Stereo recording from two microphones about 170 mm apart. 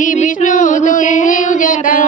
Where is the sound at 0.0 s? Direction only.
50° left (ahead or behind).